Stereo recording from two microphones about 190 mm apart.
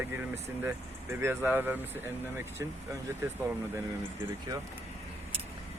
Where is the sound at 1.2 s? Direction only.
10° right (ahead or behind).